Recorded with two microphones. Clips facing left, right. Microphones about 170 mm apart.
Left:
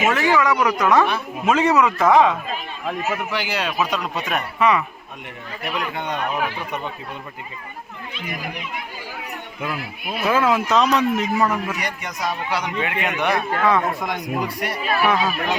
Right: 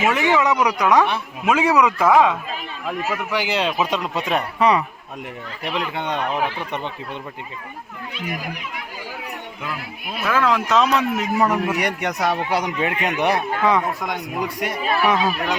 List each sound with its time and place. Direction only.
0.1 s a man's voice: 20° right (ahead or behind)
3.3 s speech: 20° right (ahead or behind)
10.3 s speech: 10° left (ahead or behind)
11.4 s a man's voice: 15° right (ahead or behind)
11.8 s speech: 65° right (ahead or behind); by 12.7 s 50° right (ahead or behind)
12.8 s a man's voice: 35° right (ahead or behind)
13.6 s a man's voice: 15° right (ahead or behind)